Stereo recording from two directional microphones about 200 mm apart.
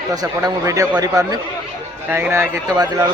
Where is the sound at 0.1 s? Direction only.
15° right (ahead or behind).